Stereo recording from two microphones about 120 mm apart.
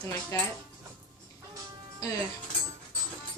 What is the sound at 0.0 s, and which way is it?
Speech, 30° left (ahead or behind).